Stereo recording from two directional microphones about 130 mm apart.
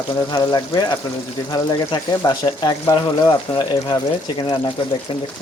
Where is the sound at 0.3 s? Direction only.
30° left (ahead or behind).